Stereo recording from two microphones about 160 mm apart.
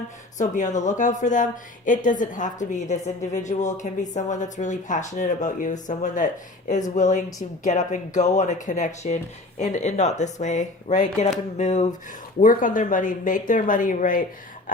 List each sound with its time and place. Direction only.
0.3 s speech: 50° left (ahead or behind)
12.4 s speech: 55° left (ahead or behind)